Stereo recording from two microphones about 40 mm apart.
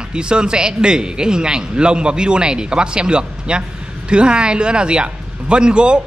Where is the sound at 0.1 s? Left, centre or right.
Right.